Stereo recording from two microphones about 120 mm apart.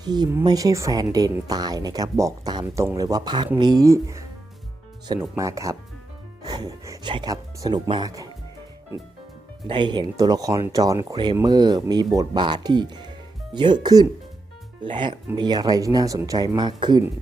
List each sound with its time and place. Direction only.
0.0 s speech: 35° right (ahead or behind)
5.4 s speech: 25° right (ahead or behind); by 8.1 s 40° right (ahead or behind)
9.6 s speech: 40° right (ahead or behind)